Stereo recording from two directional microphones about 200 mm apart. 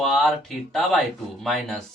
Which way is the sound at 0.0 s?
Centre (ahead or behind).